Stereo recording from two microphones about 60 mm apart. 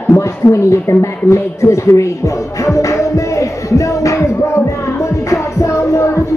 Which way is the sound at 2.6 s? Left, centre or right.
Left.